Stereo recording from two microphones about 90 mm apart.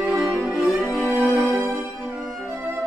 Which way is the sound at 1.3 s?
Centre (ahead or behind).